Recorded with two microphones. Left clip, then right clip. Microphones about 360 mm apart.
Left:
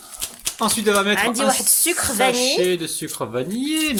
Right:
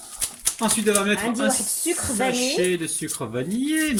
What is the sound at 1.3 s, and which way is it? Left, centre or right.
Speech, left.